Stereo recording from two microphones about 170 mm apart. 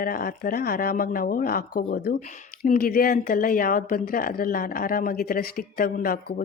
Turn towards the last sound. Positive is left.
turn(degrees=55)  # may be behind; listen again after turning